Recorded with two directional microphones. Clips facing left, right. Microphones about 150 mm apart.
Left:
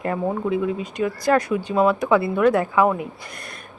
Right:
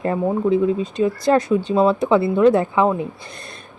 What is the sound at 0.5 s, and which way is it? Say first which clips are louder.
Speech: right 5 dB; 30° right (ahead or behind).